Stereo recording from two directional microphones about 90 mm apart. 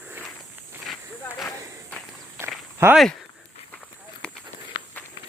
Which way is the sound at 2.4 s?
25° right (ahead or behind).